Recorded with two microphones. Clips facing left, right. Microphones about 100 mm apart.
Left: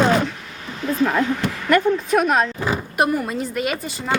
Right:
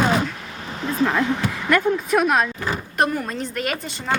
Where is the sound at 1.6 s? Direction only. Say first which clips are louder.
Left 2 dB; centre (ahead or behind).